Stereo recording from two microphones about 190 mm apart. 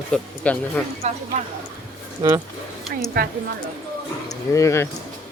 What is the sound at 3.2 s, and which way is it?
Speech, 50° right (ahead or behind).